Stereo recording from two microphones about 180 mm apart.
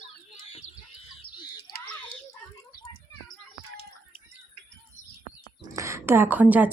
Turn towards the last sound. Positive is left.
turn(degrees=-10)  # may be behind; listen again after turning